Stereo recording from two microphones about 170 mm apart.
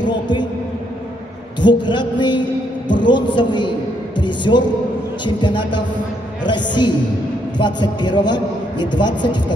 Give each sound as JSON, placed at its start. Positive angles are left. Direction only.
{"t": 1.6, "sound": "a man's voice", "side_deg": 25}
{"t": 4.2, "sound": "music", "side_deg": 25}
{"t": 5.2, "sound": "a man's voice", "side_deg": 25}